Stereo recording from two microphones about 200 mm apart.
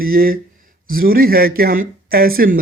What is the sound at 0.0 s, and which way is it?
Speech, 45° right (ahead or behind).